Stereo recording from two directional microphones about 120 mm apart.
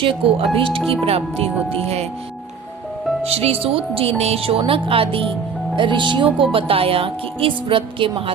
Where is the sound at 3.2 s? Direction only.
60° right (ahead or behind).